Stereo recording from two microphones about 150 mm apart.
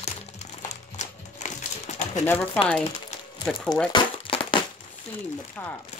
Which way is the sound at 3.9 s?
35° left (ahead or behind).